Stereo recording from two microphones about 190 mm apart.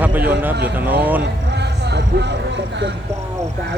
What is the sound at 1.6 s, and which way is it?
Music, 60° right (ahead or behind).